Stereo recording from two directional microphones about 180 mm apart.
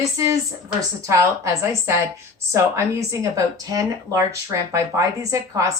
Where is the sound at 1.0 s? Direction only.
15° right (ahead or behind).